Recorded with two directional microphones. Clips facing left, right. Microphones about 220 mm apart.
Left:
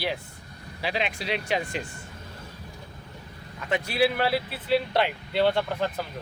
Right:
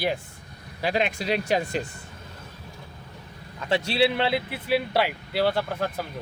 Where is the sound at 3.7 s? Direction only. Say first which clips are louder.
Right 2 dB; 25° right (ahead or behind); by 6.0 s 10° right (ahead or behind).